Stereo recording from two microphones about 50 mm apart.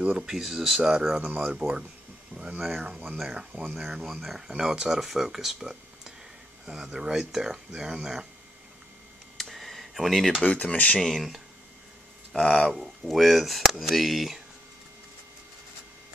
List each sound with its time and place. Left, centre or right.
0.0 s speech: centre
3.1 s speech: centre
9.4 s a sound: centre
10.4 s speech: left
11.0 s speech: centre
12.3 s speech: centre
12.7 s speech: centre